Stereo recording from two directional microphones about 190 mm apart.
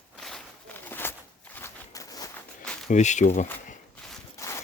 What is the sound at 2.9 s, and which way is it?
Speech, 40° left (ahead or behind).